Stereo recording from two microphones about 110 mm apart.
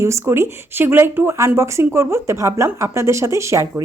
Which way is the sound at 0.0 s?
25° right (ahead or behind).